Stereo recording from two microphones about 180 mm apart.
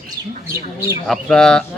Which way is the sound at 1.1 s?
5° left (ahead or behind).